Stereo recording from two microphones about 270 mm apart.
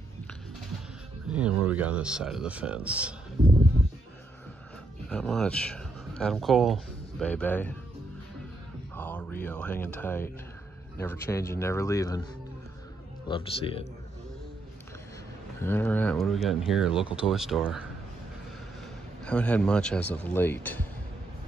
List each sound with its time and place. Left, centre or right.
1.3 s speech: centre
5.1 s speech: centre
8.9 s speech: centre
13.3 s a man's voice: centre
15.6 s speech: centre
19.2 s speech: centre